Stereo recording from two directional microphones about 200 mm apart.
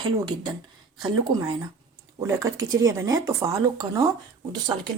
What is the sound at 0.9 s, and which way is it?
Speech, 20° right (ahead or behind).